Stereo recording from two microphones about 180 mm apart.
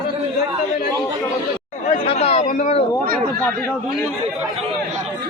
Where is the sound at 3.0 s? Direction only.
55° right (ahead or behind).